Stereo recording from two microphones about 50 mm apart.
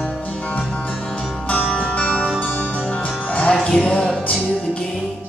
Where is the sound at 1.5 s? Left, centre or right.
Left.